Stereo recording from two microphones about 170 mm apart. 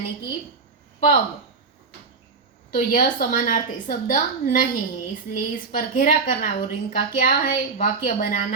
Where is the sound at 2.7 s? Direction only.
50° left (ahead or behind).